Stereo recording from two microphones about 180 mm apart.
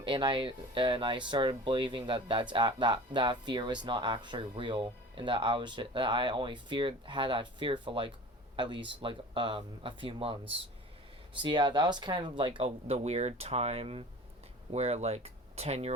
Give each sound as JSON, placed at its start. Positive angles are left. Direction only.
{"t": 0.0, "sound": "speech", "side_deg": -25}
{"t": 11.3, "sound": "speech", "side_deg": -25}